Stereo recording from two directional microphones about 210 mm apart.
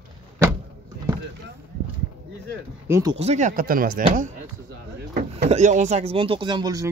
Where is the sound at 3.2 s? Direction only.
30° right (ahead or behind).